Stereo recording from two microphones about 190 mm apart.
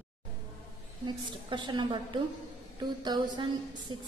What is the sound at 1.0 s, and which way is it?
A woman's voice, 25° right (ahead or behind).